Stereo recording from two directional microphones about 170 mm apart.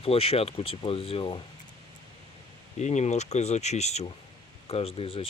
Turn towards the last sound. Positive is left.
turn(degrees=35)  # may be behind; listen again after turning